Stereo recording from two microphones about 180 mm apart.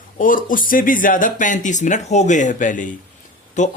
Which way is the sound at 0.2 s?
50° left (ahead or behind).